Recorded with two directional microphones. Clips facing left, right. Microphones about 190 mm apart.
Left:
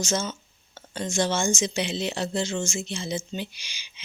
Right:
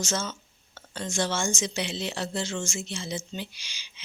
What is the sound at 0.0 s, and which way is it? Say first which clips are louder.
Speech: left 3 dB; 15° left (ahead or behind).